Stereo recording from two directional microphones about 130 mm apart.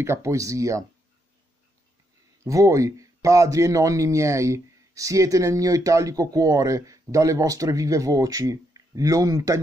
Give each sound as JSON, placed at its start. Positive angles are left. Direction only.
{"t": 0.0, "sound": "a man's voice", "side_deg": -20}
{"t": 2.4, "sound": "a man's voice", "side_deg": -25}